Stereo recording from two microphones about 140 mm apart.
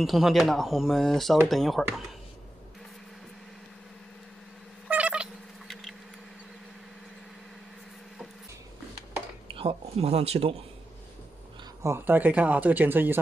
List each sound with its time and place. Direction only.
0.0 s speech: centre (ahead or behind)
4.8 s a sound: 10° right (ahead or behind)
9.5 s speech: 40° right (ahead or behind)
11.8 s speech: 15° right (ahead or behind)